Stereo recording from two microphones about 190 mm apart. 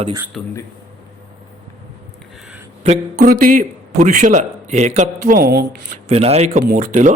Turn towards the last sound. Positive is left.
turn(degrees=-40)  # may be behind; listen again after turning